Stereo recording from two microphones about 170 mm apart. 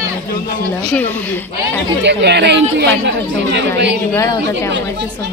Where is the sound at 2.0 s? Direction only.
90° right.